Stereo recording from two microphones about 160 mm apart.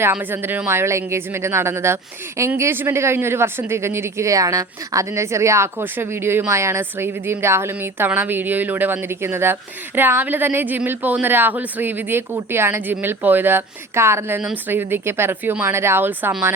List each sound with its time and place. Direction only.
0.0 s speech: 10° right (ahead or behind)